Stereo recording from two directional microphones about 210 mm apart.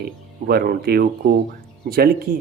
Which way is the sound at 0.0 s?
50° right (ahead or behind).